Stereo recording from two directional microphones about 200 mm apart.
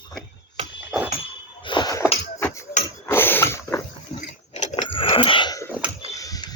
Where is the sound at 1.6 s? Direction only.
20° left (ahead or behind).